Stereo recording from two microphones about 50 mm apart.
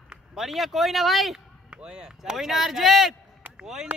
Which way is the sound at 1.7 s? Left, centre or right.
Centre.